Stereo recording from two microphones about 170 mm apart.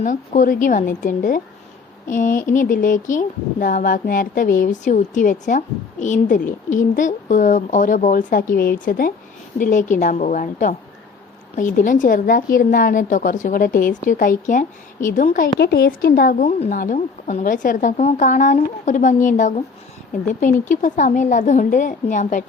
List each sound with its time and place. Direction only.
0.0 s speech: 50° left (ahead or behind)
15.5 s a woman's voice: 70° left (ahead or behind)
16.5 s speech: 45° left (ahead or behind)